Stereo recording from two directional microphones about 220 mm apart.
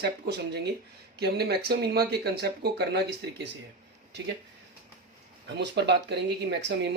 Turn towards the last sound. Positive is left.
turn(degrees=-50)  # may be behind; listen again after turning